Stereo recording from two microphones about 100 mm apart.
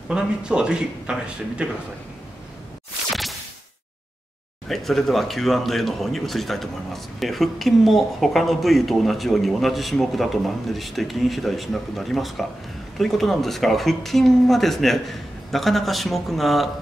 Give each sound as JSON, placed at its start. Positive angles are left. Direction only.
{"t": 0.1, "sound": "speech", "side_deg": -10}
{"t": 4.6, "sound": "speech", "side_deg": 0}